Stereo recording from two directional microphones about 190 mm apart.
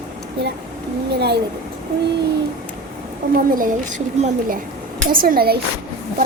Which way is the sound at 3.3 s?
45° right (ahead or behind).